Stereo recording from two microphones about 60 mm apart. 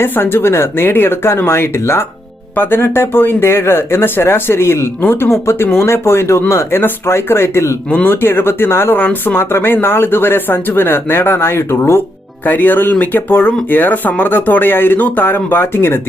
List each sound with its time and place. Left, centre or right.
0.0 s speech: left
7.9 s speech: left
8.1 s speech: left
12.5 s speech: left